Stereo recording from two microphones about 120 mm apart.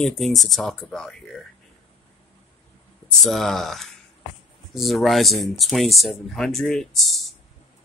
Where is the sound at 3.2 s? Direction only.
5° left (ahead or behind).